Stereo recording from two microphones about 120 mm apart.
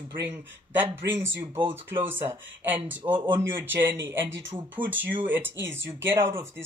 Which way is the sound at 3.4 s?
20° right (ahead or behind).